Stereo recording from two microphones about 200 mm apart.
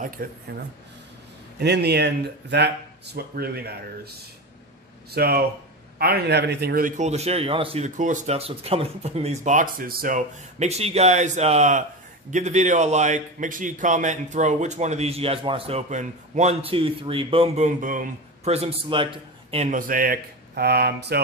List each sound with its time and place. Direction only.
0.2 s speech: 45° right (ahead or behind)
1.6 s speech: 55° right (ahead or behind)
5.1 s a man's voice: 50° right (ahead or behind)